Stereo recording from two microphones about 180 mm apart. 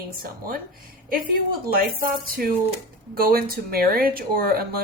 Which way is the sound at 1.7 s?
55° right (ahead or behind).